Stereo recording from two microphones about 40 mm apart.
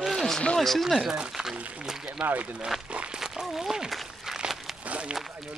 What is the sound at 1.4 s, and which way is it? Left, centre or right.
Speech, centre.